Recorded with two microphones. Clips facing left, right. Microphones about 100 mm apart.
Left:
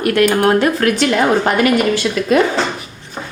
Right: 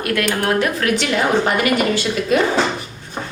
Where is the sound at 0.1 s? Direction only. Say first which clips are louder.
Left 6 dB; 40° left (ahead or behind).